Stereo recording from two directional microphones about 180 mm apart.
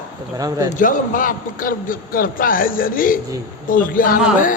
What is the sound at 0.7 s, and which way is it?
A man's voice, 50° left (ahead or behind).